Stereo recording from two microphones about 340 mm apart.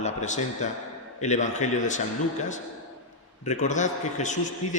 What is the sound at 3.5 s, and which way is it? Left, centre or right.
A man's voice, left.